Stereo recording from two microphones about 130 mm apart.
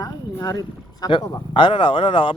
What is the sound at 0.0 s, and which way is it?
Speech, 30° left (ahead or behind).